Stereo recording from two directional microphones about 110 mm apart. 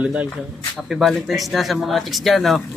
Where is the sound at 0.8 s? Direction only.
Centre (ahead or behind).